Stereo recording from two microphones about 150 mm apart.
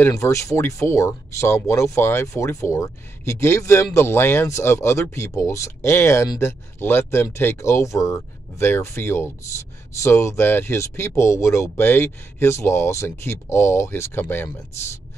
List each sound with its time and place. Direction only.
0.0 s speech: 20° left (ahead or behind)